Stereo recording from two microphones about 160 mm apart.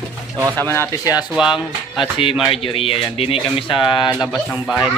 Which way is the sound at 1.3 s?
Centre (ahead or behind).